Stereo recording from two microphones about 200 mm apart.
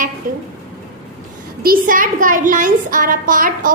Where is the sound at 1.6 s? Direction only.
45° right (ahead or behind).